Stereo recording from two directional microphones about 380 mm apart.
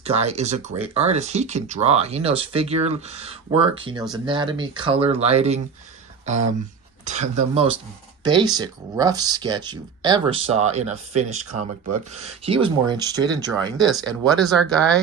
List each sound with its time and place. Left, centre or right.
0.0 s speech: centre
7.0 s speech: centre
14.1 s speech: centre